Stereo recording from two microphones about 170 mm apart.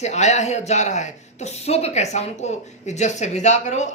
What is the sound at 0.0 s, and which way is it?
Speech, 40° left (ahead or behind).